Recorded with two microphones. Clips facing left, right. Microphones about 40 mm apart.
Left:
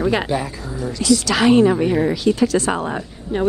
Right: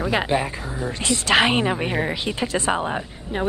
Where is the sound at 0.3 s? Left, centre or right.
Right.